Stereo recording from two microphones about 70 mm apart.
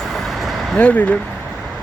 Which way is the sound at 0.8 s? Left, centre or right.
Left.